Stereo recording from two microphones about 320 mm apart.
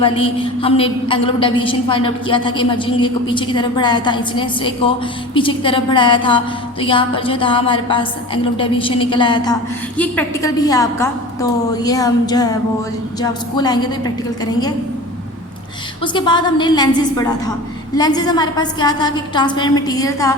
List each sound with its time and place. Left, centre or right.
0.0 s a woman's voice: centre
16.1 s a woman's voice: centre